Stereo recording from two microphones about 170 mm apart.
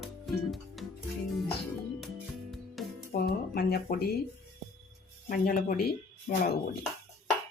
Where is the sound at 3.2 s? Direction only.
65° left (ahead or behind).